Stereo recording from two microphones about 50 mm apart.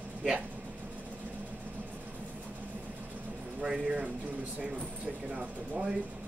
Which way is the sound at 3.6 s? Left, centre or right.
Centre.